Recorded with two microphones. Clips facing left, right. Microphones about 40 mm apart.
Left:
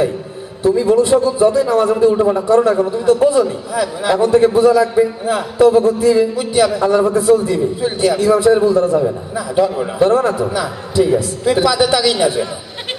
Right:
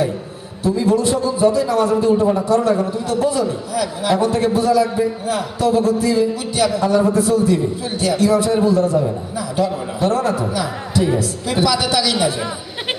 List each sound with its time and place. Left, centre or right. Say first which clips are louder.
0.6 s a man's voice: left 4 dB; left